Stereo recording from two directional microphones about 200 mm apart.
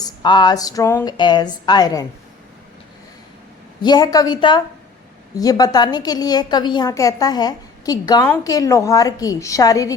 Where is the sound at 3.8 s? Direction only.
20° left (ahead or behind).